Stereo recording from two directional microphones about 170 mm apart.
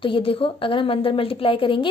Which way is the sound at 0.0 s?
30° left (ahead or behind).